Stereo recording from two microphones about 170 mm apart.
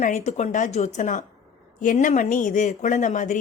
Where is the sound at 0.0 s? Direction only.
40° left (ahead or behind).